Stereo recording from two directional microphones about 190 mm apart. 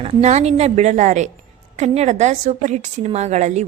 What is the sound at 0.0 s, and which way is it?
A woman's voice, 35° right (ahead or behind).